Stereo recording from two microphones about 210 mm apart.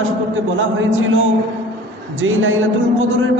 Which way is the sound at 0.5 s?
70° right (ahead or behind).